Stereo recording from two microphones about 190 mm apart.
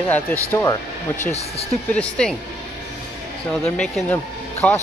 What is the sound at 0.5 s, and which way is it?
Speech, 10° left (ahead or behind).